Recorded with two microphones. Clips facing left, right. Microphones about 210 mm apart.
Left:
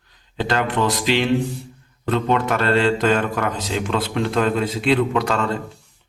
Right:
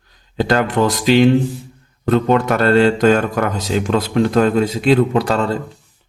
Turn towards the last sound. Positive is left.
turn(degrees=-35)  # may be behind; listen again after turning